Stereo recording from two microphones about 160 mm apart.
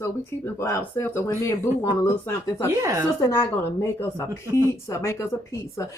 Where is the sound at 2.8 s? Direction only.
20° right (ahead or behind).